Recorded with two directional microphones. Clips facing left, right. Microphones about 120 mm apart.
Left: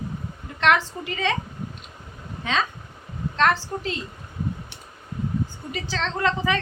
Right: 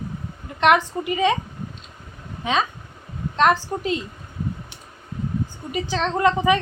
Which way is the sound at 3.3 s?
15° right (ahead or behind).